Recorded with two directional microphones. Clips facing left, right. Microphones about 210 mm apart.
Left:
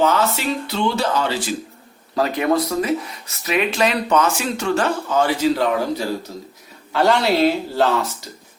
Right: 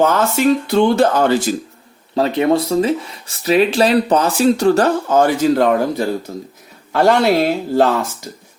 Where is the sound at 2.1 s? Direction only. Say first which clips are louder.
Right 4 dB; 25° right (ahead or behind); by 8.1 s 50° right (ahead or behind).